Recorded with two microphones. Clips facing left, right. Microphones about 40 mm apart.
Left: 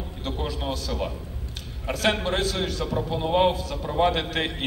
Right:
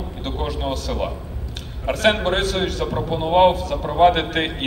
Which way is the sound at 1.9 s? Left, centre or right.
Right.